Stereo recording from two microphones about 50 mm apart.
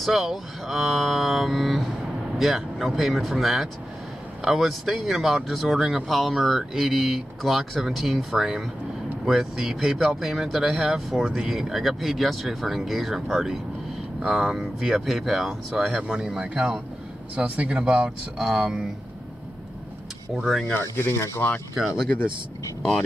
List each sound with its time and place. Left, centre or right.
0.0 s speech: centre; by 17.8 s right
18.4 s speech: centre
20.8 s speech: left
21.7 s speech: centre
22.8 s speech: centre